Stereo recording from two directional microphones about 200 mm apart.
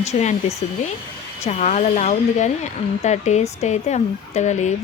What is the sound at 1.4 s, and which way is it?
Speech, 35° left (ahead or behind).